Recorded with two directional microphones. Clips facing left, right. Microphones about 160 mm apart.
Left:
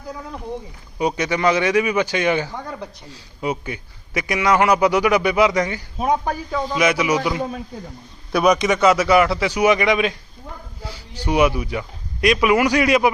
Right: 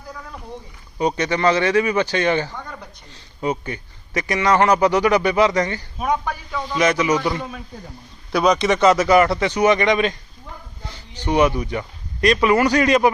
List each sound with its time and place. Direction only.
0.9 s a man's voice: 10° left (ahead or behind)
6.0 s a man's voice: 30° left (ahead or behind)
6.7 s a man's voice: 10° left (ahead or behind)
8.4 s a man's voice: 10° left (ahead or behind)